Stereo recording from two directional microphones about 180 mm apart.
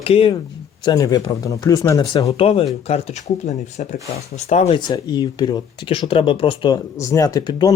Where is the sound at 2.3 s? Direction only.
35° left (ahead or behind).